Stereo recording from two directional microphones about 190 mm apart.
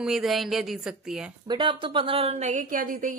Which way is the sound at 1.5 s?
25° right (ahead or behind).